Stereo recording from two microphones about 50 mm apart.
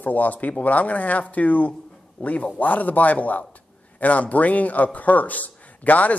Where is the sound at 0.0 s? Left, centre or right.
Left.